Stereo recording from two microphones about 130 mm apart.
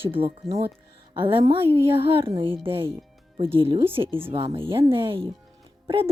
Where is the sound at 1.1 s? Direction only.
40° right (ahead or behind).